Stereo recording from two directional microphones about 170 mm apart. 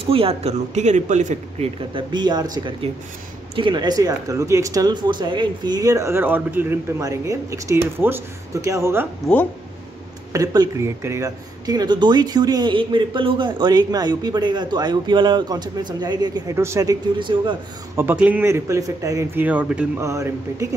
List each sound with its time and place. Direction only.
0.0 s speech: 35° right (ahead or behind)
2.0 s speech: 25° right (ahead or behind)
10.3 s speech: 20° right (ahead or behind)
17.9 s a man's voice: 10° right (ahead or behind)
20.1 s a man's voice: 15° right (ahead or behind)